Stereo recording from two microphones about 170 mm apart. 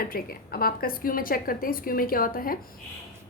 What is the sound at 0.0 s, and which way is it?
A woman's voice, 60° left (ahead or behind).